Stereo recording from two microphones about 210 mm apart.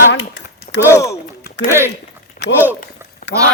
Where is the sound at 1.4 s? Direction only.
50° left (ahead or behind).